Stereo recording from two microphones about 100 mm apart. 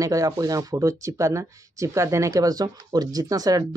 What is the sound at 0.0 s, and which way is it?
Speech, 35° right (ahead or behind).